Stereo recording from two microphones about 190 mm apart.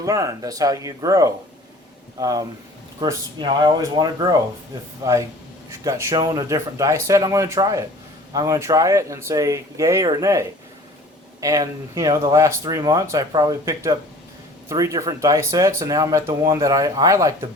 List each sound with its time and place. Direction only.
0.0 s speech: 15° right (ahead or behind)